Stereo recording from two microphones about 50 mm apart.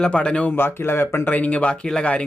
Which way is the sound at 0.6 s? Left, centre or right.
Left.